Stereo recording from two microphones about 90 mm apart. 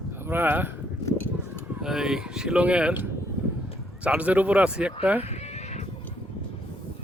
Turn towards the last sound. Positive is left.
turn(degrees=-15)  # may be behind; listen again after turning